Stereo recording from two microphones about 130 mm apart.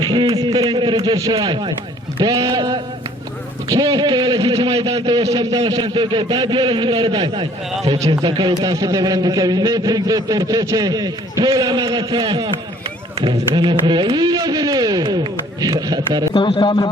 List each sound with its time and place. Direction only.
0.0 s a sound: 35° right (ahead or behind)
1.0 s speech: 30° right (ahead or behind)
7.9 s a man's voice: 25° right (ahead or behind)
16.3 s a man's voice: 40° left (ahead or behind)